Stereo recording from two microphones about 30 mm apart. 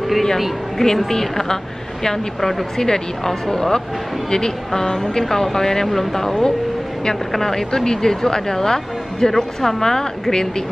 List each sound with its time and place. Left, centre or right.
0.8 s speech: centre